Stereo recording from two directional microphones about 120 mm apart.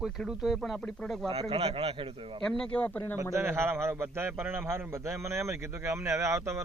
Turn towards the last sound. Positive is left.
turn(degrees=-25)  # may be behind; listen again after turning